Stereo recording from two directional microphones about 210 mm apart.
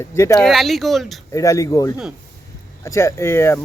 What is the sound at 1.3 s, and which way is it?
Speech, 15° left (ahead or behind).